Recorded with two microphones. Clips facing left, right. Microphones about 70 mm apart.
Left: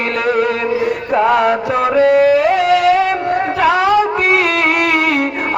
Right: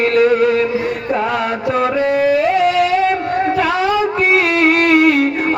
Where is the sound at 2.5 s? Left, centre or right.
Left.